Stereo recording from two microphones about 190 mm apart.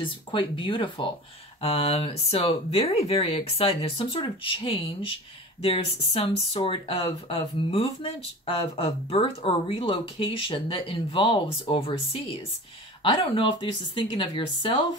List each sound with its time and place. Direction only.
0.0 s speech: 25° left (ahead or behind)